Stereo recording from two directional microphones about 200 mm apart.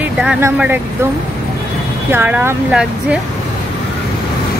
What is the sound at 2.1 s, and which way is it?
Speech, 10° right (ahead or behind).